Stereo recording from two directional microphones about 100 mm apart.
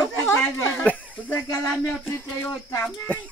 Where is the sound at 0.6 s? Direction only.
15° left (ahead or behind).